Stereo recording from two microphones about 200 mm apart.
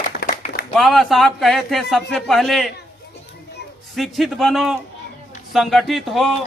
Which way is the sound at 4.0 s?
Centre (ahead or behind).